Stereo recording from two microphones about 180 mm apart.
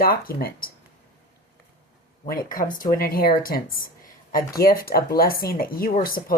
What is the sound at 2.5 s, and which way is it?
Speech, 50° left (ahead or behind).